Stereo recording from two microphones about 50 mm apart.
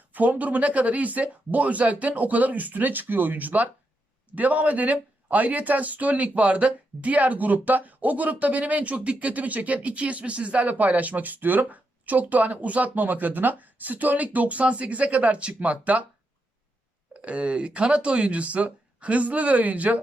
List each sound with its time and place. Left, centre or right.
0.1 s speech: right
17.2 s speech: right